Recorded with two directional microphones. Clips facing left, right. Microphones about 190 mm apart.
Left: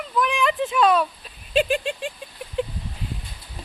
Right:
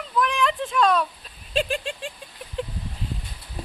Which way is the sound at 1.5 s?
5° left (ahead or behind).